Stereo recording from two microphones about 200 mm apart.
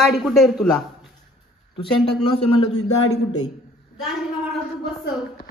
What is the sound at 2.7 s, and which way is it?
Speech, 90° left.